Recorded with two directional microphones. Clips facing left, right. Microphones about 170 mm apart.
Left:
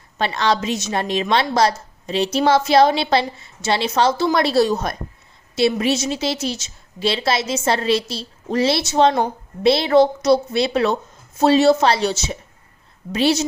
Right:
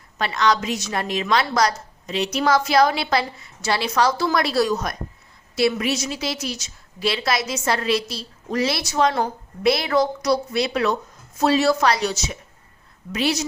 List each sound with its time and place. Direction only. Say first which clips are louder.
0.2 s a woman's voice: left 1 dB; 30° left (ahead or behind)